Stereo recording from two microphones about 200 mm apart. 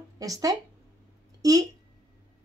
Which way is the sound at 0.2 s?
15° right (ahead or behind).